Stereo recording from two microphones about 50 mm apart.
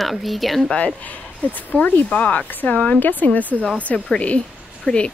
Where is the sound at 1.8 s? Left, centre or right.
Left.